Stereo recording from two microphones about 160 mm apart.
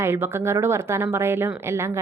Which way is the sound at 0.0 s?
15° right (ahead or behind).